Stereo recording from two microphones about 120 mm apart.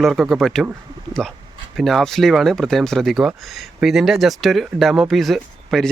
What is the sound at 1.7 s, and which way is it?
Speech, centre (ahead or behind).